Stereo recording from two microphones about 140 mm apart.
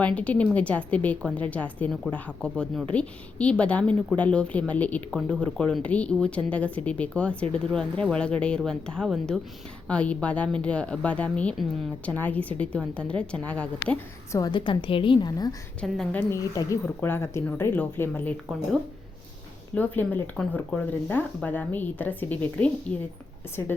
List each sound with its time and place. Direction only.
0.0 s speech: 10° left (ahead or behind)
14.3 s a woman's voice: 30° left (ahead or behind)
15.8 s speech: 10° left (ahead or behind)
16.3 s speech: 25° left (ahead or behind)
19.7 s speech: 10° left (ahead or behind)